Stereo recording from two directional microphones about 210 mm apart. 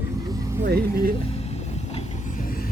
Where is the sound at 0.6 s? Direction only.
45° right (ahead or behind).